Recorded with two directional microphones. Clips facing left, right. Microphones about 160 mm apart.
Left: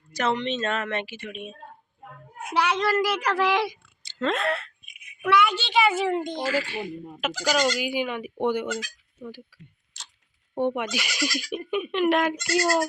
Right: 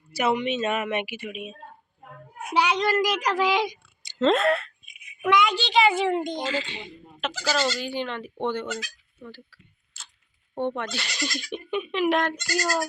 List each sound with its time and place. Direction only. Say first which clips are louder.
0.1 s a woman's voice: right 2 dB; 10° right (ahead or behind)
2.5 s a woman's voice: right 1 dB; 15° right (ahead or behind)
4.3 s speech: right 5 dB; 40° right (ahead or behind)
5.2 s a woman's voice: even; 15° right (ahead or behind)
5.5 s a woman's voice: right 1 dB; 5° left (ahead or behind)
6.1 s a child's voice: even; 15° right (ahead or behind)
7.2 s a woman's voice: left 2 dB; 10° left (ahead or behind)
12.3 s speech: left 4 dB; 20° left (ahead or behind)